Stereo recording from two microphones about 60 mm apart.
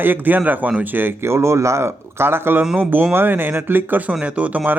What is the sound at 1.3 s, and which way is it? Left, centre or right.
Speech, right.